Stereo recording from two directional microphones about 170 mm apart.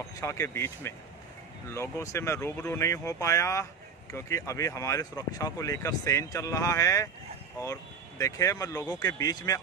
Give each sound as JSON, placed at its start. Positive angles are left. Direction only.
{"t": 0.2, "sound": "speech", "side_deg": 15}